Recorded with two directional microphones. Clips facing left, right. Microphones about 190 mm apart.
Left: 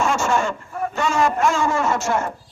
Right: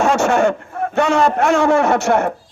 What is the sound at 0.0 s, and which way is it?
A man's voice, 65° right (ahead or behind).